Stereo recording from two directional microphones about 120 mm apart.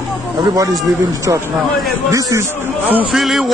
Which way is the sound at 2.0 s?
25° right (ahead or behind).